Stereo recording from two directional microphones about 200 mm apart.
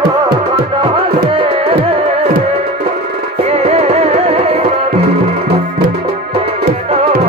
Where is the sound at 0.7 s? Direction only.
25° right (ahead or behind).